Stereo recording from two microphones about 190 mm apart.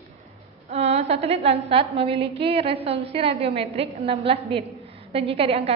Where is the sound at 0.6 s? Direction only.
35° right (ahead or behind).